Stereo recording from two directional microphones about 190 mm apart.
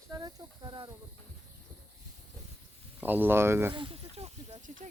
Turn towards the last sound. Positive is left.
turn(degrees=-40)  # may be behind; listen again after turning